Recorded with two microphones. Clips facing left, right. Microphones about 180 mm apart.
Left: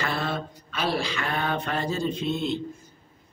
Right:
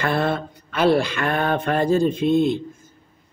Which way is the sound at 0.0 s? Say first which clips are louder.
Right 7 dB; 55° right (ahead or behind).